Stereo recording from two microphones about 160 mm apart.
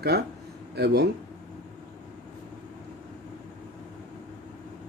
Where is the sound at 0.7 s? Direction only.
90° right.